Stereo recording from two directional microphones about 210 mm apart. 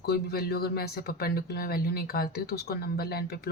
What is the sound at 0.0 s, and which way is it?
Speech, 50° left (ahead or behind).